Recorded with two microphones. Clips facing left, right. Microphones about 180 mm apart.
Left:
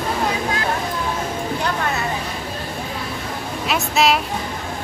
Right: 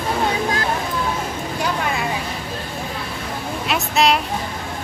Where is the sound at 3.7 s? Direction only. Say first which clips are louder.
Even; centre (ahead or behind).